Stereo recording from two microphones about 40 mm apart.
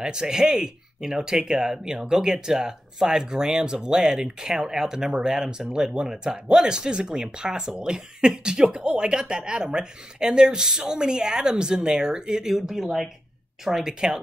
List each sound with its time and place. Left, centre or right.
0.0 s speech: centre
12.5 s speech: centre
13.7 s speech: centre